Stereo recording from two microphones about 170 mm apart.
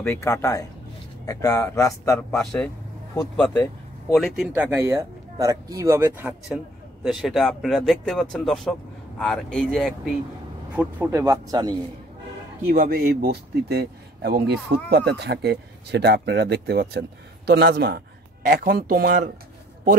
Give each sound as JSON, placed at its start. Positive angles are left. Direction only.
{"t": 0.0, "sound": "a man's voice", "side_deg": 15}
{"t": 3.3, "sound": "speech", "side_deg": 0}
{"t": 4.6, "sound": "speech", "side_deg": -15}
{"t": 10.8, "sound": "speech", "side_deg": -10}
{"t": 12.6, "sound": "speech", "side_deg": -55}